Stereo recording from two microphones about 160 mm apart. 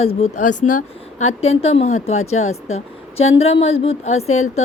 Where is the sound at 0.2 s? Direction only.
50° left (ahead or behind).